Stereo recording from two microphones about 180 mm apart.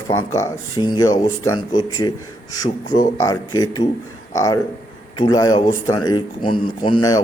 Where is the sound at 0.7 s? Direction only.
25° left (ahead or behind).